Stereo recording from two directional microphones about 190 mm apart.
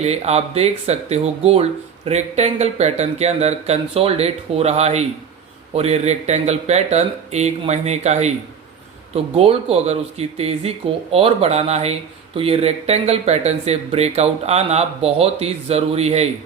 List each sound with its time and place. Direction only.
0.0 s speech: 35° right (ahead or behind)